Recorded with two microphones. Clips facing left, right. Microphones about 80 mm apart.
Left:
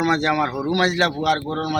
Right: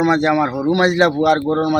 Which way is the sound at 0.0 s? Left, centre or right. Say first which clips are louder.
Right 4 dB; centre.